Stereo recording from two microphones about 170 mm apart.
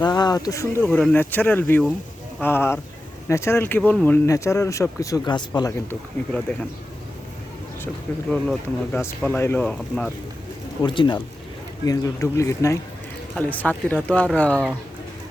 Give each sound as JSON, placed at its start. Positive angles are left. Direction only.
{"t": 0.0, "sound": "speech", "side_deg": 25}
{"t": 6.5, "sound": "speech", "side_deg": 5}
{"t": 8.3, "sound": "speech", "side_deg": 5}
{"t": 10.8, "sound": "speech", "side_deg": 30}